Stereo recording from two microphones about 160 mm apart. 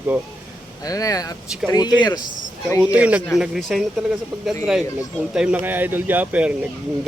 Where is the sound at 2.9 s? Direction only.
10° right (ahead or behind).